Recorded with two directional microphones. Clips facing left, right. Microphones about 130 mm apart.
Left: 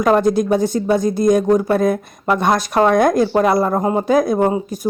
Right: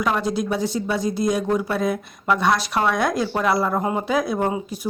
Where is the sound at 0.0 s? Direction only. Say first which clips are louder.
Left 8 dB; 45° left (ahead or behind).